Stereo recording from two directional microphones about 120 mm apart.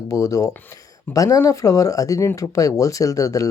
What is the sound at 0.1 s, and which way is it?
Speech, 30° left (ahead or behind).